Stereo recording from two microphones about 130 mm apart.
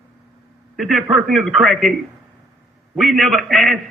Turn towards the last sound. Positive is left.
turn(degrees=0)  # may be behind; listen again after turning